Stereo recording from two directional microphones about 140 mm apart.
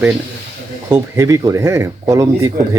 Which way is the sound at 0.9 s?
20° right (ahead or behind).